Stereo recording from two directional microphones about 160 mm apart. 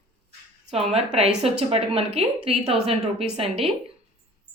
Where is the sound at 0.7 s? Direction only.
40° right (ahead or behind).